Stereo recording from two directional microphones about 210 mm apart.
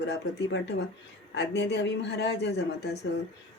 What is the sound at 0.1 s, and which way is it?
Speech, 55° left (ahead or behind).